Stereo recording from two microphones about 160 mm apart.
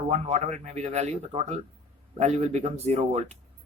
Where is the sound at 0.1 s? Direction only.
45° right (ahead or behind).